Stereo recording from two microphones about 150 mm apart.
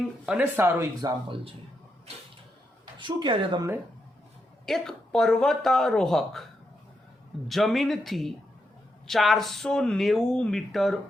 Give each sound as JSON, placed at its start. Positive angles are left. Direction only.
{"t": 0.3, "sound": "speech", "side_deg": -10}
{"t": 3.0, "sound": "a woman's voice", "side_deg": -30}
{"t": 4.6, "sound": "speech", "side_deg": 5}